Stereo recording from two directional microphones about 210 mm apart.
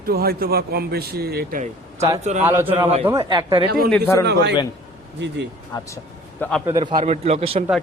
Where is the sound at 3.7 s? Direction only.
45° right (ahead or behind).